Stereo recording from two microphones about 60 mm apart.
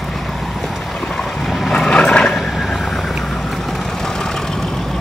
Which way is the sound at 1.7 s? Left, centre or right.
Centre.